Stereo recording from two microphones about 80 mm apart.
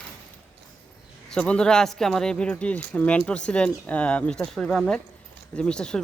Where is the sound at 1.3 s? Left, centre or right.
Centre.